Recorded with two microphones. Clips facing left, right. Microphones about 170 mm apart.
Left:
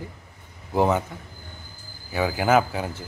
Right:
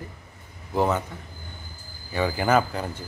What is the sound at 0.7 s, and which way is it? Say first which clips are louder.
Speech: left 2 dB; 15° left (ahead or behind).